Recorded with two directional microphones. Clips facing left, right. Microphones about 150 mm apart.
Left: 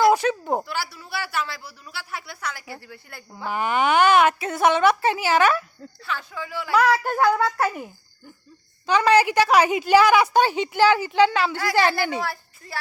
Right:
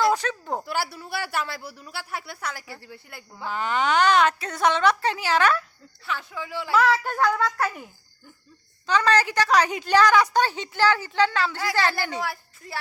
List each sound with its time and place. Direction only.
0.0 s a sound: 10° left (ahead or behind)
0.6 s a man's voice: 50° right (ahead or behind)
2.8 s speech: 20° right (ahead or behind)
3.3 s a woman's voice: 15° left (ahead or behind)
6.1 s speech: 20° right (ahead or behind)
6.7 s a woman's voice: centre (ahead or behind)
8.9 s a woman's voice: 10° left (ahead or behind)
12.2 s a woman's voice: 15° right (ahead or behind)